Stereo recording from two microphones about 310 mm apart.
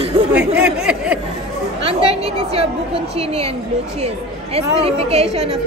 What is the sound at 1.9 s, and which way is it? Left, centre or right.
A woman's voice, centre.